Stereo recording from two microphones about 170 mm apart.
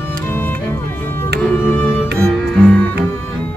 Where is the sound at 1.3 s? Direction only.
5° left (ahead or behind).